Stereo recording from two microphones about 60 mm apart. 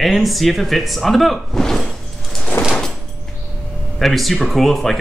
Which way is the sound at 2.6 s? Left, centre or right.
Left.